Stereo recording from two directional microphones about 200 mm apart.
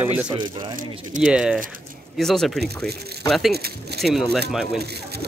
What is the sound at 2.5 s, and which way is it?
Speech, 50° right (ahead or behind).